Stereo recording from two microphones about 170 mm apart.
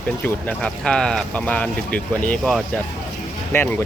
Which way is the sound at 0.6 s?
5° left (ahead or behind).